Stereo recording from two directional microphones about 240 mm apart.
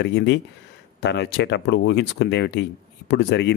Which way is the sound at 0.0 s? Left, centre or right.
Left.